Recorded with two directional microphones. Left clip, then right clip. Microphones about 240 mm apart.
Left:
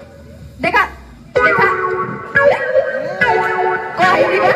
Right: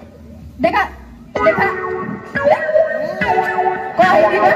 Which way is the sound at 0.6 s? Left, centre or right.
Centre.